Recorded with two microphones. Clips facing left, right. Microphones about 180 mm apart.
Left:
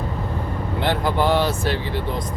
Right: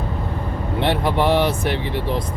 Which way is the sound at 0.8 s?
25° right (ahead or behind).